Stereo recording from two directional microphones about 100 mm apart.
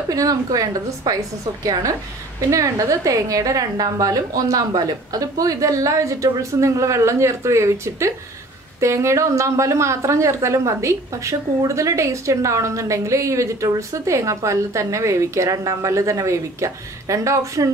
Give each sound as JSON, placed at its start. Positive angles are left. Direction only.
{"t": 0.1, "sound": "a woman's voice", "side_deg": -35}